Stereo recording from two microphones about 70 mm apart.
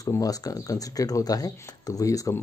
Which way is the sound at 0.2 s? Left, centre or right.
Left.